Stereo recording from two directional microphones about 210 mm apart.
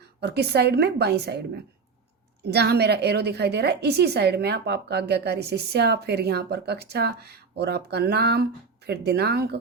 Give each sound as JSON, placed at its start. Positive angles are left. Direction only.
{"t": 0.2, "sound": "a woman's voice", "side_deg": -50}
{"t": 2.4, "sound": "a woman's voice", "side_deg": -50}